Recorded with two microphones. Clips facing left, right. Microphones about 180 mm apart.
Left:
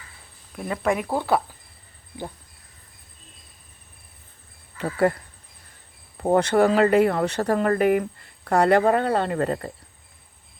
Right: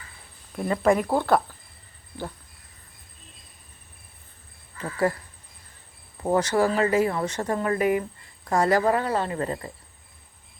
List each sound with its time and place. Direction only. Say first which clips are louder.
0.5 s speech: right 3 dB; centre (ahead or behind)
4.8 s speech: left 4 dB; 60° left (ahead or behind)
6.3 s speech: left 4 dB; 55° left (ahead or behind)